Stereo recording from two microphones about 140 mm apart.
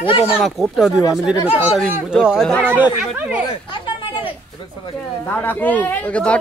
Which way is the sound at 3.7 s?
35° left (ahead or behind).